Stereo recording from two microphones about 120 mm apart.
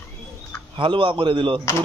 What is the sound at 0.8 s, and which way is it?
Speech, 45° right (ahead or behind).